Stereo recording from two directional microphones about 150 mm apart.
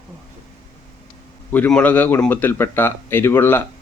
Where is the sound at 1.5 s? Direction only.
10° left (ahead or behind).